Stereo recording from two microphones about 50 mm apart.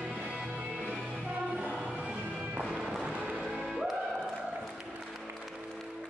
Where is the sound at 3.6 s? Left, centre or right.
Centre.